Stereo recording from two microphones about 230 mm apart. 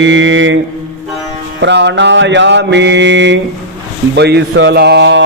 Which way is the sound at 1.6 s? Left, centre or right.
Right.